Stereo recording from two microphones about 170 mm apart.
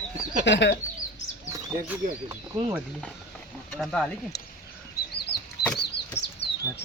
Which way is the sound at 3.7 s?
5° left (ahead or behind).